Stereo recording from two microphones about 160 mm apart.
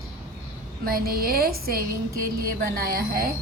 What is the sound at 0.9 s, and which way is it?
A woman's voice, 65° right (ahead or behind).